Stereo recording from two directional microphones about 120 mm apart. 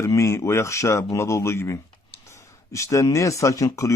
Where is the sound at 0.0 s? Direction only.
25° left (ahead or behind).